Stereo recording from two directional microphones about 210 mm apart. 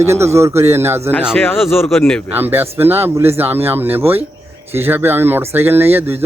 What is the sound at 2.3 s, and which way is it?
Speech, 10° right (ahead or behind).